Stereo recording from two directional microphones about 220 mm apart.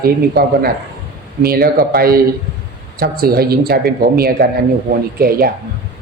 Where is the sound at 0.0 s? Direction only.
45° right (ahead or behind).